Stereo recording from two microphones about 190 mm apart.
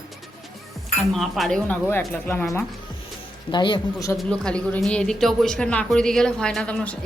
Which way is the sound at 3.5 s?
25° left (ahead or behind).